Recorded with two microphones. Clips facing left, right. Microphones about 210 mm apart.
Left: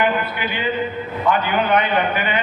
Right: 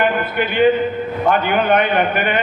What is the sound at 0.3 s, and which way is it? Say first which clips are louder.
A man's voice: right 9 dB; 55° right (ahead or behind).